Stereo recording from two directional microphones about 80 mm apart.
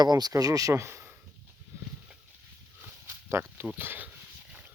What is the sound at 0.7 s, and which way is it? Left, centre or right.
Speech, right.